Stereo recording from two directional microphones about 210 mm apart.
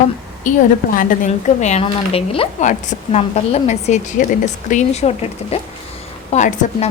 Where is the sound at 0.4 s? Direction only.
35° left (ahead or behind).